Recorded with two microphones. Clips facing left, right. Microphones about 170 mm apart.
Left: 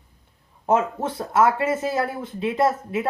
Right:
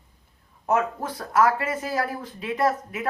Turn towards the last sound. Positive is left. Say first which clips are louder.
# left 3 dB
turn(degrees=25)  # may be behind; listen again after turning